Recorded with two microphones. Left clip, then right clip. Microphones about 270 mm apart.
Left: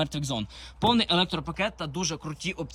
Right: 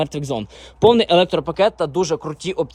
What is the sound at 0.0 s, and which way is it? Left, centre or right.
Speech, centre.